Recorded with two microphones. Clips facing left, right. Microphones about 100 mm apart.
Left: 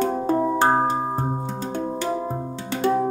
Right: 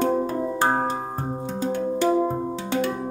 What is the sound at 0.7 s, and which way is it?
Music, 20° left (ahead or behind).